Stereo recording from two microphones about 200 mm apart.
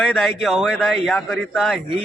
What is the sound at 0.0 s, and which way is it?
A man's voice, centre (ahead or behind).